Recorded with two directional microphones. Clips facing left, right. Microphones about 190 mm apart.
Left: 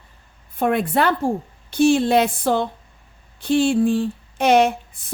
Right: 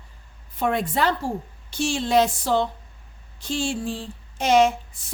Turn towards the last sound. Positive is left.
turn(degrees=55)  # may be behind; listen again after turning